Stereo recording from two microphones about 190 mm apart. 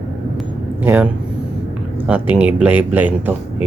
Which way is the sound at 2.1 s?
5° right (ahead or behind).